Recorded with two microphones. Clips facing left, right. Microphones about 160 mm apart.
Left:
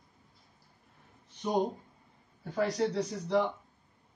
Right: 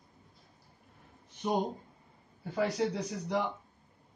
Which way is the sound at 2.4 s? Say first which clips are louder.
Left 1 dB; 5° right (ahead or behind).